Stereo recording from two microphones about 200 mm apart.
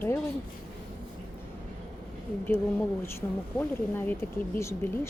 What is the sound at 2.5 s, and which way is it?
Speech, 10° left (ahead or behind).